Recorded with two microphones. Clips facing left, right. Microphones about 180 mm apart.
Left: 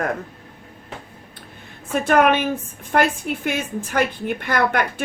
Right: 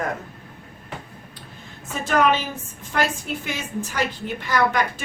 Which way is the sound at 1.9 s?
55° left (ahead or behind).